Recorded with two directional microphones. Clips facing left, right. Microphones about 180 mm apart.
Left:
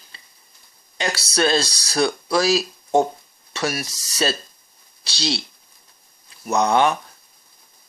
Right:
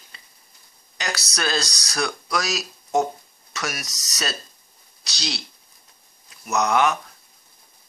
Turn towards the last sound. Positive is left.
turn(degrees=30)  # may be behind; listen again after turning